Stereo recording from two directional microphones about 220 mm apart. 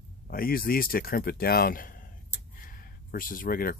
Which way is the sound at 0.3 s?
40° left (ahead or behind).